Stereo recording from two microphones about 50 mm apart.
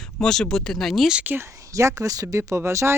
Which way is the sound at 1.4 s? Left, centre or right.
Right.